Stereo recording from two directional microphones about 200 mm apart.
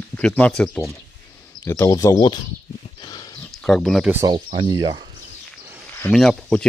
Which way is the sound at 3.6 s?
Centre (ahead or behind).